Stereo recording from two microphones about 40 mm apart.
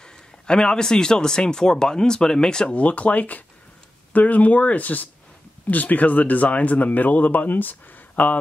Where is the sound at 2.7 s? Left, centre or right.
Left.